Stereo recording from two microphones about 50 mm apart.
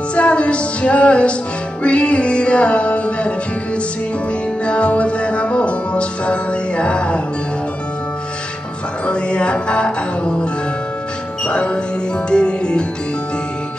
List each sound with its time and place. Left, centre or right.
0.1 s music: left
4.6 s music: left
9.0 s music: left